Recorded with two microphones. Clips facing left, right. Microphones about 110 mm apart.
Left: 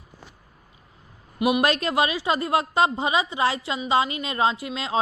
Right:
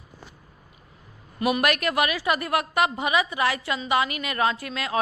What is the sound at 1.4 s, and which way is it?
Speech, 20° left (ahead or behind).